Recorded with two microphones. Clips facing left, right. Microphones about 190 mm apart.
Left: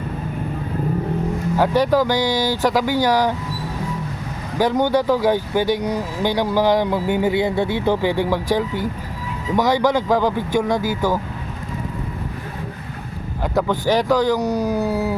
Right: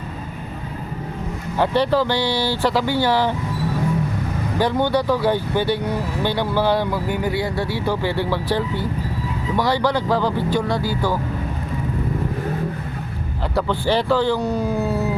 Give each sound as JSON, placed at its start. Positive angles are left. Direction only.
{"t": 1.5, "sound": "speech", "side_deg": 10}
{"t": 4.5, "sound": "speech", "side_deg": 10}
{"t": 13.6, "sound": "speech", "side_deg": 15}
{"t": 14.3, "sound": "speech", "side_deg": 40}